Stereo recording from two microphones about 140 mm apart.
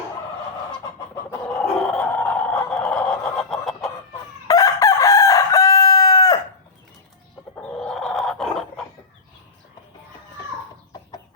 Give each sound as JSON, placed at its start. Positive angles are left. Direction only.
{"t": 1.8, "sound": "a sound", "side_deg": 5}
{"t": 4.4, "sound": "chicken", "side_deg": 25}
{"t": 7.6, "sound": "dog", "side_deg": 5}